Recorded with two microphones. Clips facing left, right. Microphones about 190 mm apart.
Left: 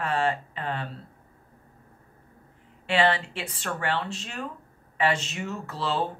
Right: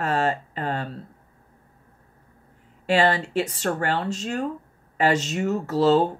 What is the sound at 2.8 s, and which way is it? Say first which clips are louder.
A woman's voice: right 3 dB; 40° right (ahead or behind).